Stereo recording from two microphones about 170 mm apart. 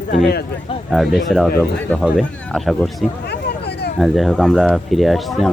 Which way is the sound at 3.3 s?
75° left (ahead or behind).